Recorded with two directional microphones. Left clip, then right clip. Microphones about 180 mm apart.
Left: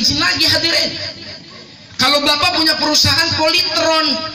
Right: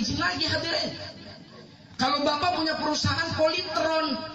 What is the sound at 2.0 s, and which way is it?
A man's voice, 55° right (ahead or behind).